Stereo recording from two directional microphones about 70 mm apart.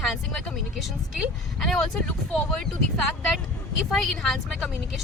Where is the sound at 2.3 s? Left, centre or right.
Centre.